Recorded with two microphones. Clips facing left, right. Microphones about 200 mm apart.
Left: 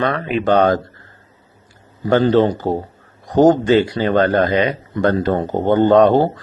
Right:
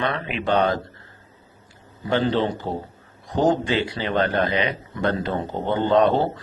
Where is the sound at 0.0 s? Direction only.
40° left (ahead or behind).